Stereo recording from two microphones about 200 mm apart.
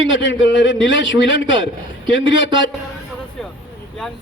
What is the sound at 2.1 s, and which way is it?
Speech, 65° left (ahead or behind).